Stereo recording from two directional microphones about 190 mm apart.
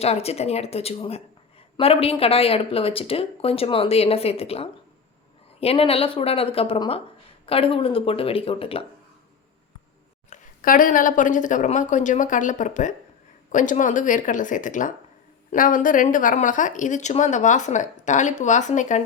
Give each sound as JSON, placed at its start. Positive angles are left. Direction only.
{"t": 0.0, "sound": "a woman's voice", "side_deg": 35}
{"t": 10.2, "sound": "a woman's voice", "side_deg": 40}